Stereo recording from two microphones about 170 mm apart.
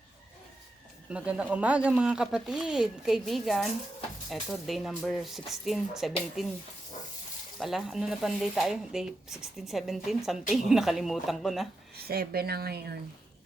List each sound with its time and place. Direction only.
1.1 s speech: 5° right (ahead or behind)
7.6 s speech: centre (ahead or behind)
11.9 s speech: 65° right (ahead or behind)